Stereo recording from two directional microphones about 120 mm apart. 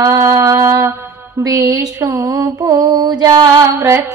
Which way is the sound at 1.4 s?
30° right (ahead or behind).